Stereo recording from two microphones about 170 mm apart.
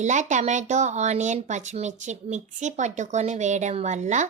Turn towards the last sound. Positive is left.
turn(degrees=-45)  # may be behind; listen again after turning